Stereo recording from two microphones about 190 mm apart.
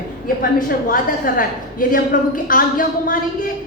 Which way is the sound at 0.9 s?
45° left (ahead or behind).